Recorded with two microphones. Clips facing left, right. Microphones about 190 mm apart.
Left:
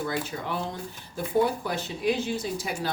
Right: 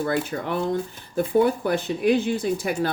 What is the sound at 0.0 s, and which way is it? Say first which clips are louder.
Speech: right 6 dB; 55° right (ahead or behind).